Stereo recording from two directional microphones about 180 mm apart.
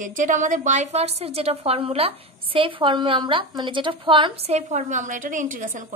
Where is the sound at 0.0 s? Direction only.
45° right (ahead or behind).